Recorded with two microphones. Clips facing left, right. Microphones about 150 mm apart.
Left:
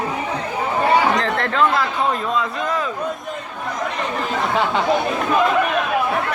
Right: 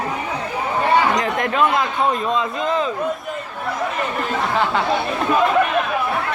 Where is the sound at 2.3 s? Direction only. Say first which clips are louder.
Right 1 dB; 25° right (ahead or behind).